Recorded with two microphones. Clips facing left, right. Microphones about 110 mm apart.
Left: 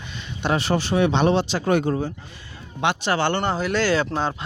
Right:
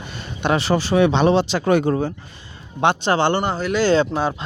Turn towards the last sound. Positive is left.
turn(degrees=-10)  # may be behind; listen again after turning